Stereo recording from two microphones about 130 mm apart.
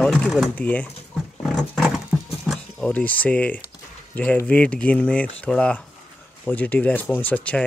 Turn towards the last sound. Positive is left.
turn(degrees=10)  # may be behind; listen again after turning